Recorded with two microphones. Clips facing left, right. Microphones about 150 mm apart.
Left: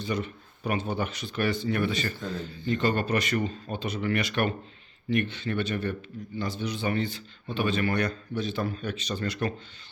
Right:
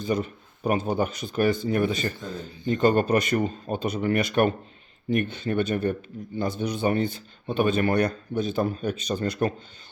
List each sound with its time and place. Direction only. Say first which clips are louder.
0.1 s a man's voice: right 5 dB; 40° right (ahead or behind)